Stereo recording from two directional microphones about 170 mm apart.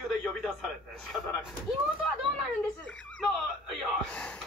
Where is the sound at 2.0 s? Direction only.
5° left (ahead or behind).